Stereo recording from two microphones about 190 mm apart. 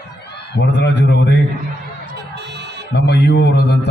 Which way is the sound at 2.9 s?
65° left (ahead or behind).